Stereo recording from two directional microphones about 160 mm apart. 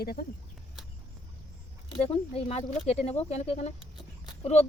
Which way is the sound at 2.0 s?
40° left (ahead or behind).